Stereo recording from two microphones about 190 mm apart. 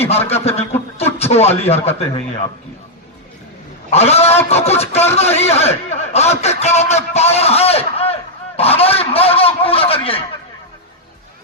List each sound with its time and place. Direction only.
0.0 s speech: 35° left (ahead or behind)
3.8 s a man's voice: 35° left (ahead or behind)
8.5 s a sound: 30° left (ahead or behind)